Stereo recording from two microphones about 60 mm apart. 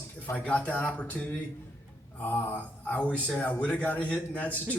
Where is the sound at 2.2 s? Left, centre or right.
Left.